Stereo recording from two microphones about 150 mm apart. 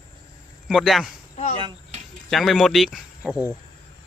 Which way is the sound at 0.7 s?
Centre (ahead or behind).